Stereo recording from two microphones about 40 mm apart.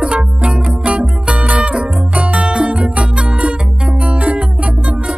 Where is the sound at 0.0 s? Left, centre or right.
Right.